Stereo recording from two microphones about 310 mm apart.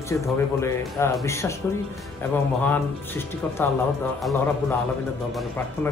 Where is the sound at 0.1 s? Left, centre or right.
Centre.